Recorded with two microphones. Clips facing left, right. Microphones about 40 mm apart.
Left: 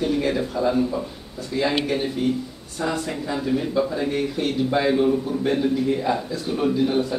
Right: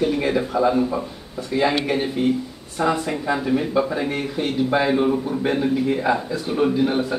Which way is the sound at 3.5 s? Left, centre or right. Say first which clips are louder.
Even; right.